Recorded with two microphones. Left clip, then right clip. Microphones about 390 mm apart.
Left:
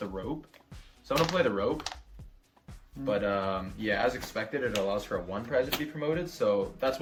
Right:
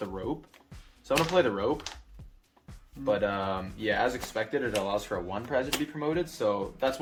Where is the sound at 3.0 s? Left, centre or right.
Centre.